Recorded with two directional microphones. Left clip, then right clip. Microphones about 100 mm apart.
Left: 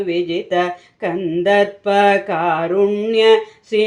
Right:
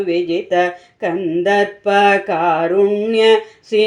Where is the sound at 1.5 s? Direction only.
15° right (ahead or behind).